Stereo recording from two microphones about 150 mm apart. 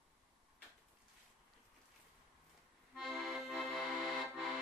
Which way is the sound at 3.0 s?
Centre (ahead or behind).